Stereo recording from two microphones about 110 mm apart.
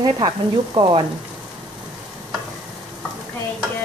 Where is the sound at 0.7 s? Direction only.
45° right (ahead or behind).